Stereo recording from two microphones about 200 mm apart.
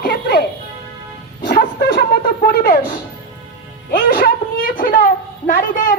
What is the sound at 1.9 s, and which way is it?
Wind instrument, 50° left (ahead or behind).